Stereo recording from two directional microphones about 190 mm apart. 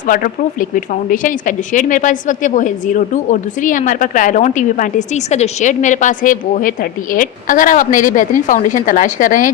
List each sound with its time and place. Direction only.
0.1 s a woman's voice: 45° left (ahead or behind)